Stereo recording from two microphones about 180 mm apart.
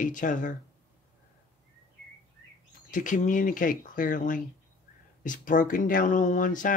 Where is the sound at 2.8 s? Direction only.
45° left (ahead or behind).